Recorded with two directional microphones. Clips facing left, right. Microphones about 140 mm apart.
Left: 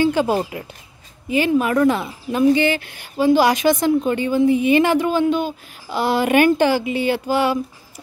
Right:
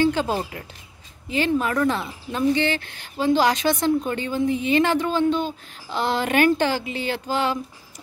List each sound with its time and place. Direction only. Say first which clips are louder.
0.0 s speech: left 4 dB; 10° left (ahead or behind)